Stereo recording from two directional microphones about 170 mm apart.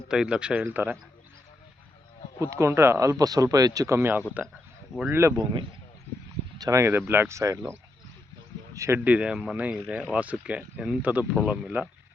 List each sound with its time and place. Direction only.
0.1 s speech: 5° right (ahead or behind)
2.4 s speech: 15° right (ahead or behind)
6.6 s speech: 20° right (ahead or behind)